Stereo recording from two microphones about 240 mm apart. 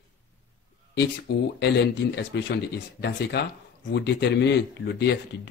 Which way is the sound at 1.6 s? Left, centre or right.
Left.